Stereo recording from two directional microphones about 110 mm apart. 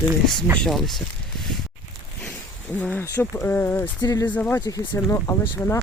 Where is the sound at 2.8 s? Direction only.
15° left (ahead or behind).